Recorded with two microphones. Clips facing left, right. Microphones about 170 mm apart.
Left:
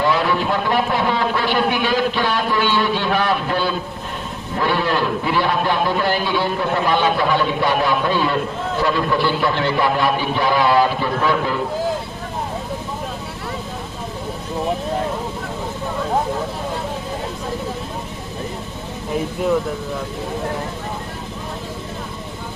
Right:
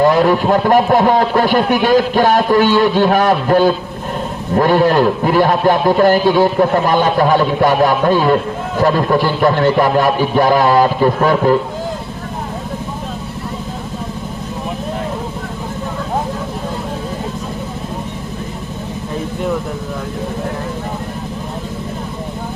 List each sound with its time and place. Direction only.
0.0 s a man's voice: 45° right (ahead or behind)